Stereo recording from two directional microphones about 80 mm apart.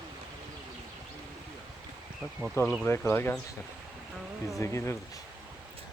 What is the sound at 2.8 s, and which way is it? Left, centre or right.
Speech, left.